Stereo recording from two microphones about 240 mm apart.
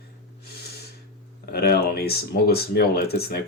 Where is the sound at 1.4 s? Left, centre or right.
Left.